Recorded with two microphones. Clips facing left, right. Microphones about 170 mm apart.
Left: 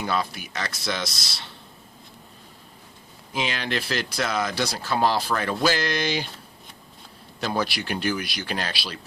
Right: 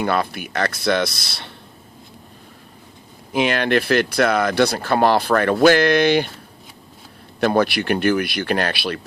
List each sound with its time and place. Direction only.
0.0 s speech: 60° right (ahead or behind)
3.3 s speech: 60° right (ahead or behind)
7.3 s speech: 60° right (ahead or behind)